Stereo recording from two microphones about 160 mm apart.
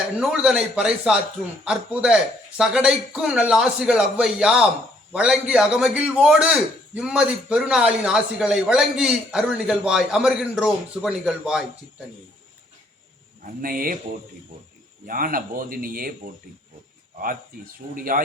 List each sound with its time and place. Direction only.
0.2 s a man's voice: 5° right (ahead or behind)
13.4 s speech: 60° right (ahead or behind)
15.0 s speech: 60° right (ahead or behind)
17.9 s speech: 60° right (ahead or behind)